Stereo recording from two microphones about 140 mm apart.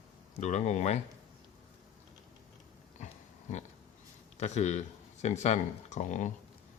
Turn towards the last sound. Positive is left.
turn(degrees=60)  # may be behind; listen again after turning